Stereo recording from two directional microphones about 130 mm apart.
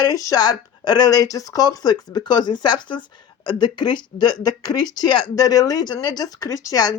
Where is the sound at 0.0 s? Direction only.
25° left (ahead or behind).